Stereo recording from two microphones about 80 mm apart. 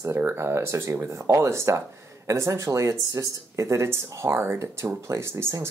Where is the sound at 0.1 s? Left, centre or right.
Right.